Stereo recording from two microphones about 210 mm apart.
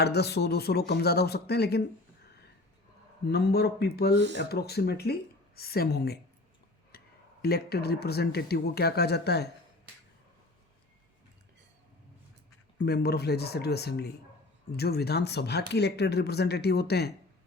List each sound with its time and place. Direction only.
0.0 s speech: 50° left (ahead or behind)
3.2 s speech: 50° left (ahead or behind)
6.9 s a sound: 45° left (ahead or behind)
7.4 s speech: 50° left (ahead or behind)
12.8 s speech: 50° left (ahead or behind)